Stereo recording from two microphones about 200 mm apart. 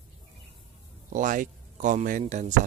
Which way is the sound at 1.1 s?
40° right (ahead or behind).